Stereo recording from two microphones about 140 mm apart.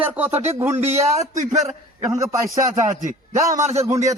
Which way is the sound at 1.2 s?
65° right (ahead or behind).